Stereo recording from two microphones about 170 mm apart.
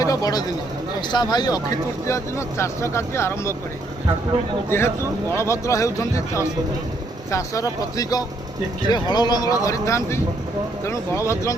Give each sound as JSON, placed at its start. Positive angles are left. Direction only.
{"t": 0.0, "sound": "a sound", "side_deg": 20}
{"t": 1.1, "sound": "speech", "side_deg": 25}
{"t": 4.7, "sound": "speech", "side_deg": 15}